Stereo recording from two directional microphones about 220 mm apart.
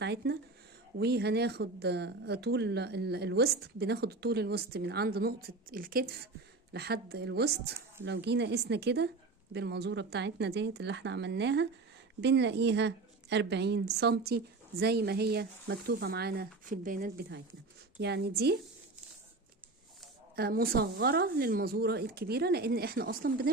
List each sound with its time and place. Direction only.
0.0 s speech: 50° right (ahead or behind)
20.3 s speech: 45° right (ahead or behind)